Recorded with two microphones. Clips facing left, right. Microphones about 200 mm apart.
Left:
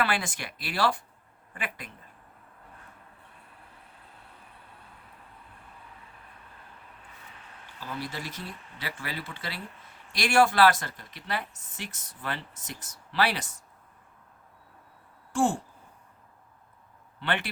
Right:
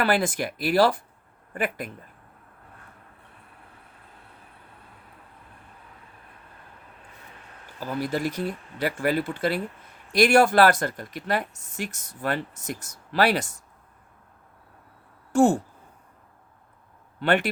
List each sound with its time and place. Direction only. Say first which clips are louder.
0.0 s speech: right 6 dB; 40° right (ahead or behind)
7.8 s speech: right 9 dB; 45° right (ahead or behind)
15.4 s speech: right 7 dB; 40° right (ahead or behind)
17.2 s speech: right 9 dB; 45° right (ahead or behind)